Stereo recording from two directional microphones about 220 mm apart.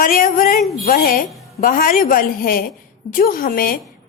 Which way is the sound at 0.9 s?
45° left (ahead or behind).